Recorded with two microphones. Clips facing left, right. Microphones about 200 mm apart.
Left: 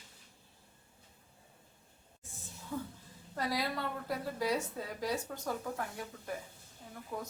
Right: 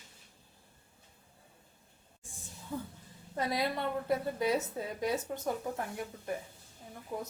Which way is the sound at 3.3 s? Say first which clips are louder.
Right 3 dB; 25° right (ahead or behind).